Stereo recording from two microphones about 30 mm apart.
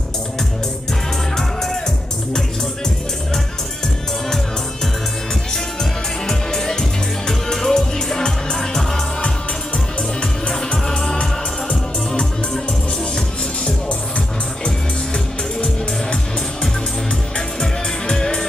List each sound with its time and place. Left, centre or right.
1.3 s music: centre
6.2 s music: centre
18.0 s music: left